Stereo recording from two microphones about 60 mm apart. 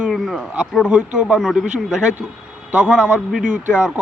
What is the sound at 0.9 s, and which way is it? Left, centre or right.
Speech, centre.